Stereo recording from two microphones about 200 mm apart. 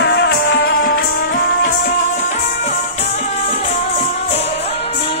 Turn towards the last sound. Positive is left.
turn(degrees=35)  # may be behind; listen again after turning